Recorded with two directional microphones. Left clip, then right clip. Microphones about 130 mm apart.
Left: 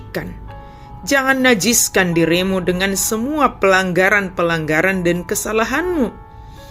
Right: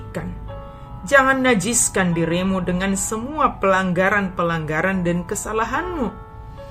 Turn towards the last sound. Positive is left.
turn(degrees=30)  # may be behind; listen again after turning